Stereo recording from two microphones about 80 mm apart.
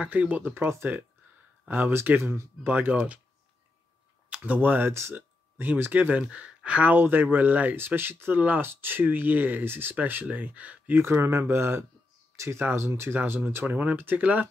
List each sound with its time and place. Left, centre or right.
0.0 s speech: centre
4.3 s speech: centre
11.0 s speech: right